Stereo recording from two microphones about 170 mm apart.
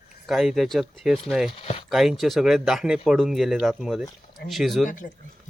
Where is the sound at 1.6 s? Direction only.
35° left (ahead or behind).